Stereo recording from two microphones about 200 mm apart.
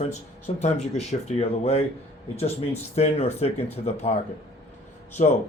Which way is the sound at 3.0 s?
30° left (ahead or behind).